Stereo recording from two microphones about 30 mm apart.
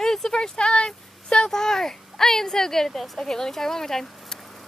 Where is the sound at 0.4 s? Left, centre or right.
Left.